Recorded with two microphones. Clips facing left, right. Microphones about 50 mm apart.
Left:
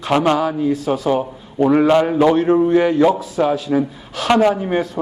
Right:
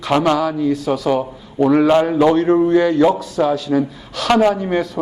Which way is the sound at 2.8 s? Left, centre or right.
Centre.